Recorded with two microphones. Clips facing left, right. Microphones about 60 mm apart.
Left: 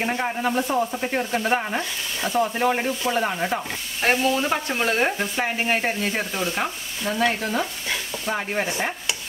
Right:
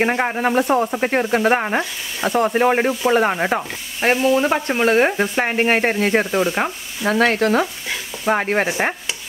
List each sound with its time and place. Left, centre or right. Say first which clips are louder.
0.0 s speech: right 6 dB; right
4.2 s frying: right 5 dB; centre
5.2 s speech: right 6 dB; right
6.3 s frying: right 7 dB; right
7.1 s speech: right 7 dB; right